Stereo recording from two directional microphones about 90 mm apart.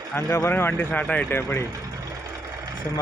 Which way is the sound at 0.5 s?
20° left (ahead or behind).